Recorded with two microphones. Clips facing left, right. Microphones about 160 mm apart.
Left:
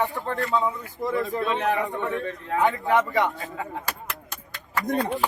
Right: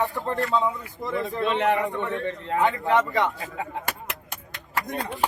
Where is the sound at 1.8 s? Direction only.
20° left (ahead or behind).